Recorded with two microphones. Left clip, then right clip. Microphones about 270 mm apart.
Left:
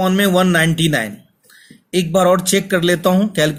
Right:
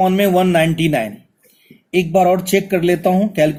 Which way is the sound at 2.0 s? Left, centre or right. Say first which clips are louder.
Even; left.